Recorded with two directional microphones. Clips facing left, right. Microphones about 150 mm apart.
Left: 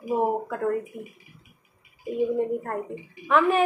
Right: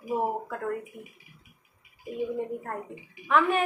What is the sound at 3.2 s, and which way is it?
Speech, centre (ahead or behind).